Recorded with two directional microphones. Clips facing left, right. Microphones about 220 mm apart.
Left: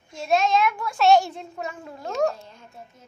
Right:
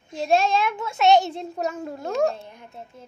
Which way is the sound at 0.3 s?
30° right (ahead or behind).